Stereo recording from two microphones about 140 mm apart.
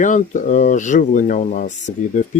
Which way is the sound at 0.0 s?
65° left (ahead or behind).